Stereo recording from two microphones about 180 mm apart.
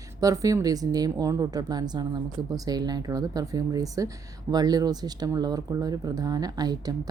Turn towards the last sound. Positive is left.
turn(degrees=-20)  # may be behind; listen again after turning